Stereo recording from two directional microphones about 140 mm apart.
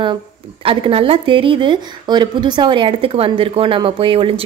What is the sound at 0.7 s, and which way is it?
Speech, 40° right (ahead or behind).